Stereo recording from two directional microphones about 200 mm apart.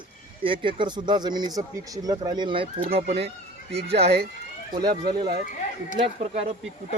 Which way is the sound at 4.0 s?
55° right (ahead or behind).